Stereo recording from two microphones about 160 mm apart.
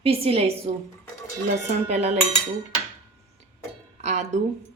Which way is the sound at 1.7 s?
45° right (ahead or behind).